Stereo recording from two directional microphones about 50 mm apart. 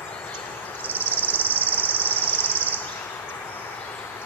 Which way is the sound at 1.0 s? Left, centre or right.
Left.